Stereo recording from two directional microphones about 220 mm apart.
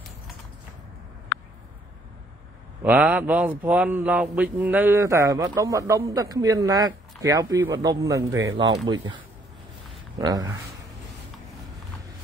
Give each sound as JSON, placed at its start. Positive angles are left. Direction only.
{"t": 2.8, "sound": "speech", "side_deg": -5}
{"t": 10.1, "sound": "speech", "side_deg": -15}